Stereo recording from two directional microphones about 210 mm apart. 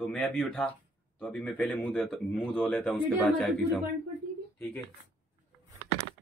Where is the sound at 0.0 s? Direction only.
5° left (ahead or behind).